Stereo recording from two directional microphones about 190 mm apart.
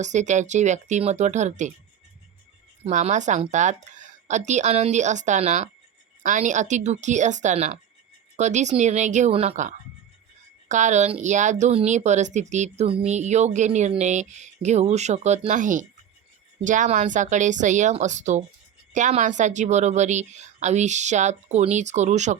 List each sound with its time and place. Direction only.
0.0 s speech: 40° right (ahead or behind)
2.8 s speech: 40° right (ahead or behind)